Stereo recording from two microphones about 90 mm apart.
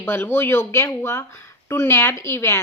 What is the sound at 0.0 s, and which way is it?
A woman's voice, 25° left (ahead or behind).